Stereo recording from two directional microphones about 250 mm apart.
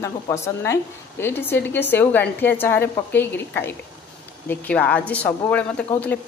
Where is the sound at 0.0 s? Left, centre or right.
Centre.